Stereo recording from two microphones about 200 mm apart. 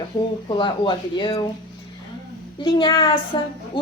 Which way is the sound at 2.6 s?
25° left (ahead or behind).